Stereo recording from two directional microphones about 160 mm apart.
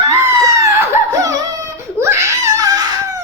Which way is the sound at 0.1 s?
20° right (ahead or behind).